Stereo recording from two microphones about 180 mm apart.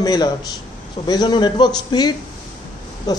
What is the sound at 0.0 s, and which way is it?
A woman's voice, 20° left (ahead or behind).